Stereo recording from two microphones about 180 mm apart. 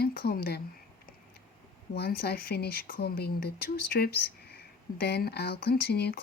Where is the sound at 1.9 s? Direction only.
60° left (ahead or behind).